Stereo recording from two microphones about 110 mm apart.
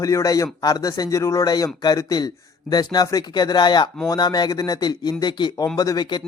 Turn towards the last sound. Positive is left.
turn(degrees=35)  # may be behind; listen again after turning